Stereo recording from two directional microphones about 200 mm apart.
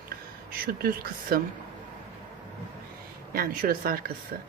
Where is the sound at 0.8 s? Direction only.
50° right (ahead or behind).